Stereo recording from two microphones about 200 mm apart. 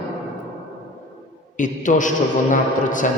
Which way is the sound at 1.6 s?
40° left (ahead or behind).